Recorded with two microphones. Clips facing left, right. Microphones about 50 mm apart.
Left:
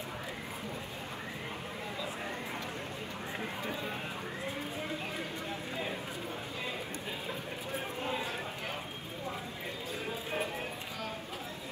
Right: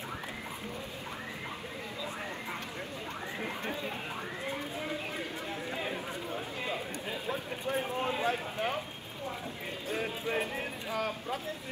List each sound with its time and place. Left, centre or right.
4.5 s a sound: right
6.7 s speech: right
9.8 s speech: right